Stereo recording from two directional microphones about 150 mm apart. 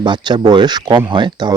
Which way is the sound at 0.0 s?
30° right (ahead or behind).